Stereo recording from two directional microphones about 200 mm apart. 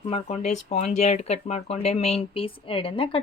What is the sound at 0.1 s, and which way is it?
Speech, 35° left (ahead or behind).